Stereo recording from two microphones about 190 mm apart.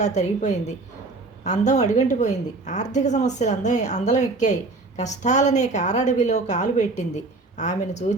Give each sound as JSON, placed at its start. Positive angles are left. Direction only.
{"t": 0.0, "sound": "a woman's voice", "side_deg": 40}